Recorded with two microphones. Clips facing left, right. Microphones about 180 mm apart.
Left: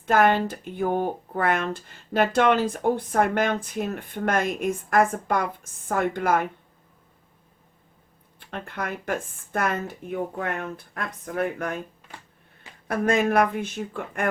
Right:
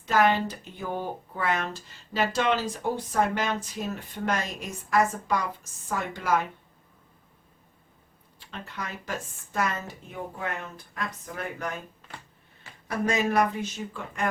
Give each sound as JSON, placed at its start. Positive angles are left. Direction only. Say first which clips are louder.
{"t": 0.0, "sound": "speech", "louder": "left 3 dB", "side_deg": 55}
{"t": 8.4, "sound": "speech", "louder": "left 6 dB", "side_deg": 55}
{"t": 12.9, "sound": "speech", "louder": "left 4 dB", "side_deg": 55}